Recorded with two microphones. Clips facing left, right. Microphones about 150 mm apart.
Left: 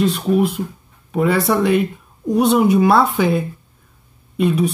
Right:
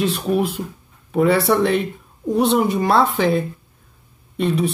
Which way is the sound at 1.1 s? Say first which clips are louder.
Right 1 dB; centre (ahead or behind).